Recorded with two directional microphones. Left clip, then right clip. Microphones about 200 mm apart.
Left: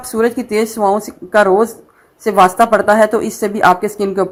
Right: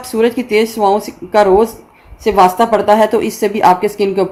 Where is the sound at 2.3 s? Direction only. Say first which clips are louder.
Even; 25° left (ahead or behind).